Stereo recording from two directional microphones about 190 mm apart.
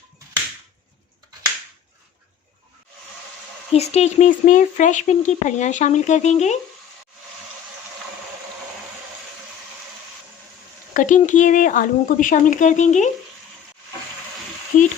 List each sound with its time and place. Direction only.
3.7 s speech: 35° left (ahead or behind)
10.9 s speech: 40° left (ahead or behind)
14.7 s speech: 40° left (ahead or behind)